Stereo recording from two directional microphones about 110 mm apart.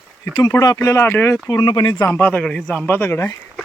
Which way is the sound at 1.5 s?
40° left (ahead or behind).